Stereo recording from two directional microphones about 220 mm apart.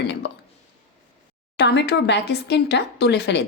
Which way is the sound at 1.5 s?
50° left (ahead or behind).